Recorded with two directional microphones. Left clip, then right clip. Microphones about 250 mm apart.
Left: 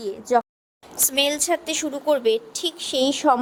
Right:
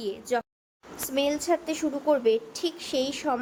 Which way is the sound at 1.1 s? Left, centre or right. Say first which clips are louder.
Left 4 dB; left.